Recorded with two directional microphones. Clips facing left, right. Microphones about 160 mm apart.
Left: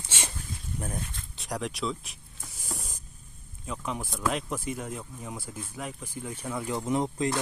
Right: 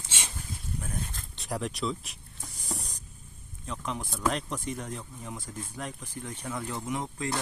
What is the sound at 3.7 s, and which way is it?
Speech, 5° left (ahead or behind).